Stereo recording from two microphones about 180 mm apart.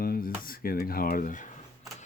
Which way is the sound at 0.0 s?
55° left (ahead or behind).